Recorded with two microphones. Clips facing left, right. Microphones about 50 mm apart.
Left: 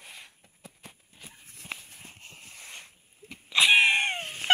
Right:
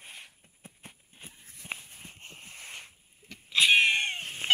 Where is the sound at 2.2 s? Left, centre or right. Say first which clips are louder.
Right 1 dB; right.